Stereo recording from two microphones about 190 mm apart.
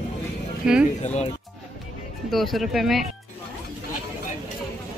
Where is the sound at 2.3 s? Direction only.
Centre (ahead or behind).